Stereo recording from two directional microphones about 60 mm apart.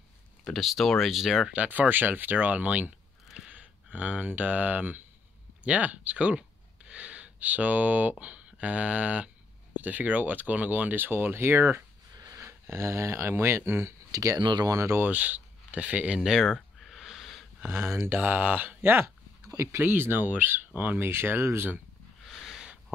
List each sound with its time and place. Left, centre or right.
0.5 s speech: centre
1.5 s speech: right
12.2 s sniff: right
12.4 s speech: right
14.1 s speech: right
15.0 s speech: right
16.2 s a sound: centre
17.6 s speech: right
18.0 s speech: right
18.8 s speech: right
19.4 s speech: right
19.8 s speech: right
21.1 s speech: right
22.3 s a sound: centre